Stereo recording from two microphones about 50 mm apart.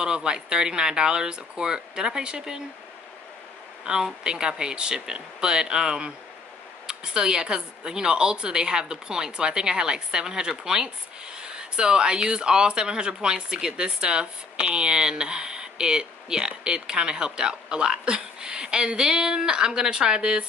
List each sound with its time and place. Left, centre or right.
0.0 s speech: centre
3.8 s speech: centre